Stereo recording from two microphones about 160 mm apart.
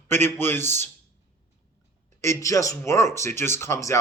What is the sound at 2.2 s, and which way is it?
Speech, 20° left (ahead or behind).